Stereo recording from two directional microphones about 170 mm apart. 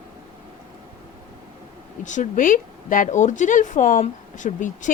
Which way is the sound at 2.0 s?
45° left (ahead or behind).